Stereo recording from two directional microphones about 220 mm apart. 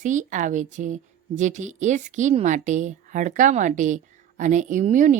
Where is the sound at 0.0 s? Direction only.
35° right (ahead or behind).